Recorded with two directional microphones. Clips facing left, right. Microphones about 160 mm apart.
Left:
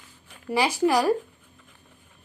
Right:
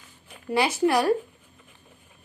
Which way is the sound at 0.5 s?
10° left (ahead or behind).